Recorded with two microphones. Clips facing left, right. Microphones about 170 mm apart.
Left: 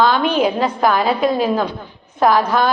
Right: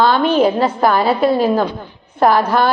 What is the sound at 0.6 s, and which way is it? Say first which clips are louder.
Speech: right 2 dB; 5° right (ahead or behind).